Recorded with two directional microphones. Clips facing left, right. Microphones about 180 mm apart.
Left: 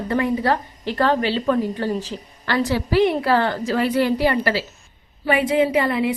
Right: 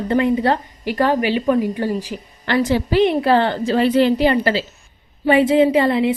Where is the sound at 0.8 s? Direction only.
10° right (ahead or behind).